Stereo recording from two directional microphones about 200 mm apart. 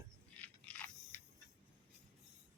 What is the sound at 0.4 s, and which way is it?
Biting, 5° left (ahead or behind).